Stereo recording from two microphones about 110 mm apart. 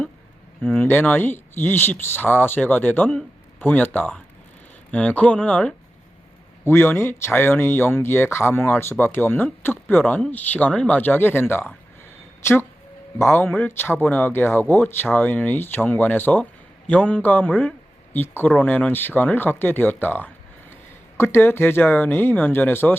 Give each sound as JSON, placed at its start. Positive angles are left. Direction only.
{"t": 0.6, "sound": "speech", "side_deg": 15}
{"t": 6.7, "sound": "speech", "side_deg": 25}
{"t": 13.1, "sound": "speech", "side_deg": 20}